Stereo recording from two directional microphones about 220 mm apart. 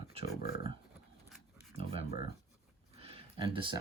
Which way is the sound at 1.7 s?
25° right (ahead or behind).